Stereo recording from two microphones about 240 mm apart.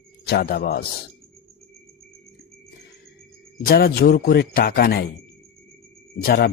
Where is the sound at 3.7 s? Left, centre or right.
Left.